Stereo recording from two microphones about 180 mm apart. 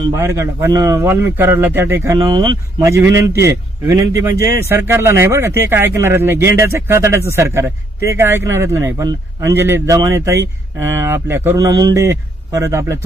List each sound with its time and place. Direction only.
0.2 s a man's voice: 15° right (ahead or behind)
2.1 s a man's voice: 25° right (ahead or behind)